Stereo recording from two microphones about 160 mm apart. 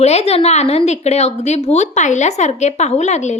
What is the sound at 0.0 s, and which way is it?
A woman's voice, 40° left (ahead or behind).